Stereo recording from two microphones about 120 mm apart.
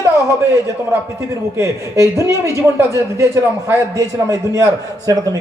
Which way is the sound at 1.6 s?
25° right (ahead or behind).